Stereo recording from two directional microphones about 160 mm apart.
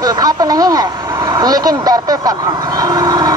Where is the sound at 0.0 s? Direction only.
25° right (ahead or behind).